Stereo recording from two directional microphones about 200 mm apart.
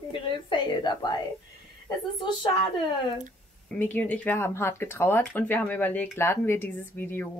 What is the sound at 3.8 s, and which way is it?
Speech, 10° left (ahead or behind).